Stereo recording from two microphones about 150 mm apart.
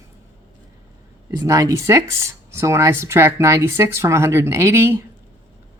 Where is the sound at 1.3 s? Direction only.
25° right (ahead or behind).